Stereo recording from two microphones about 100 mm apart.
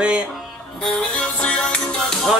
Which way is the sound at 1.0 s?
10° left (ahead or behind).